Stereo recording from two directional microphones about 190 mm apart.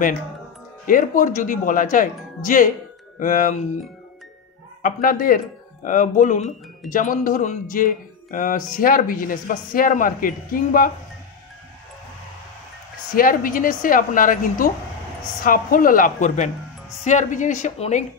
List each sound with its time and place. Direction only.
0.8 s speech: 45° left (ahead or behind)
4.8 s a woman's voice: 45° left (ahead or behind)
13.1 s a woman's voice: 45° left (ahead or behind)